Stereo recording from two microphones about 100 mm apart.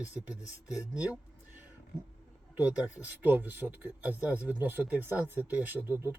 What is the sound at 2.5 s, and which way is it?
Speech, 15° right (ahead or behind).